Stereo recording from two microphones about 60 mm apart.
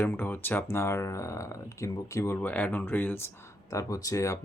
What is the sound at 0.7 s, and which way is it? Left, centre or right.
Speech, left.